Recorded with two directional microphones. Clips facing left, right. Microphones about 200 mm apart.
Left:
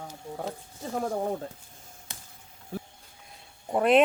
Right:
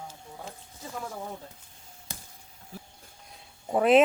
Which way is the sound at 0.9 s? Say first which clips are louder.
Left 9 dB; 45° left (ahead or behind).